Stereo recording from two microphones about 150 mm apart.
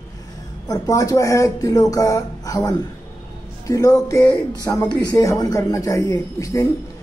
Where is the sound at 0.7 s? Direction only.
20° left (ahead or behind).